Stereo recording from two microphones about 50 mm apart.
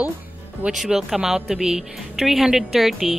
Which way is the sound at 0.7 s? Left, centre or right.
Centre.